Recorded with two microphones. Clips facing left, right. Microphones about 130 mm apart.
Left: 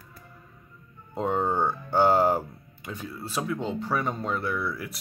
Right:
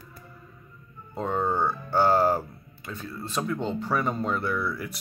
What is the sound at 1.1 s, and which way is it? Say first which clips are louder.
Speech: left 1 dB; 15° left (ahead or behind).